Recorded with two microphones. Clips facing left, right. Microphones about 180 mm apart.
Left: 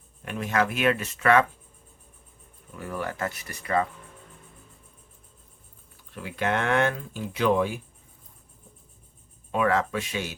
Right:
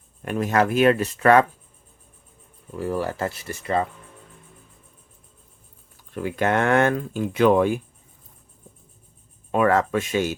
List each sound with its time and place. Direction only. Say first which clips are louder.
0.3 s speech: right 5 dB; 45° right (ahead or behind)
2.7 s speech: right 7 dB; 30° right (ahead or behind)
6.1 s speech: right 6 dB; 50° right (ahead or behind)
9.5 s speech: right 5 dB; 50° right (ahead or behind)